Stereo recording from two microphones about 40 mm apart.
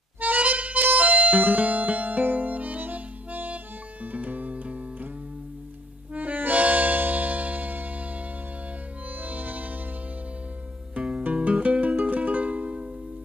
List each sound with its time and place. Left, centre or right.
0.2 s harmonica: right
0.8 s music: right
6.1 s music: right
9.2 s music: right
11.0 s music: right
11.3 s music: right
11.9 s music: right